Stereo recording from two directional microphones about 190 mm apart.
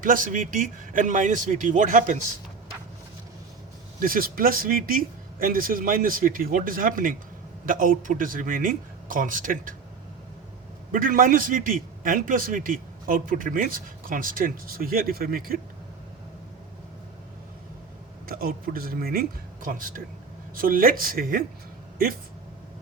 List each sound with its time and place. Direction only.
0.0 s a man's voice: 45° right (ahead or behind)
4.0 s a man's voice: 50° right (ahead or behind)
10.9 s a man's voice: 45° right (ahead or behind)
18.3 s a man's voice: 50° right (ahead or behind)